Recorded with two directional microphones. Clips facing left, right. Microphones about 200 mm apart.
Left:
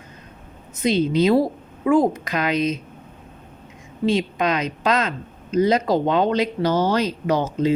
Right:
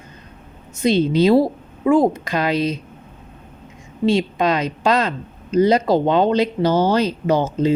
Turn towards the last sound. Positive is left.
turn(degrees=-30)  # may be behind; listen again after turning